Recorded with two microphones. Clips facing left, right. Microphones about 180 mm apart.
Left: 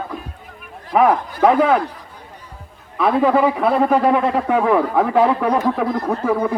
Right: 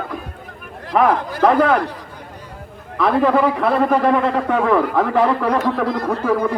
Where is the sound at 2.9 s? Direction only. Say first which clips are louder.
Even; 5° left (ahead or behind).